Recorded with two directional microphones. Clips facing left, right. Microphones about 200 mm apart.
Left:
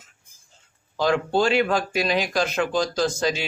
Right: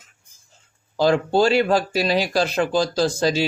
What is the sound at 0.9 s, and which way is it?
Speech, 35° right (ahead or behind).